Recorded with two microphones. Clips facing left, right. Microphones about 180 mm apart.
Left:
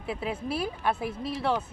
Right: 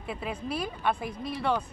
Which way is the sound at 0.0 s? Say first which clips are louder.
Left 2 dB; 5° left (ahead or behind).